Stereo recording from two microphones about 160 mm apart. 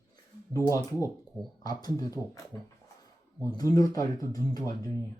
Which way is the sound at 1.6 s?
25° left (ahead or behind).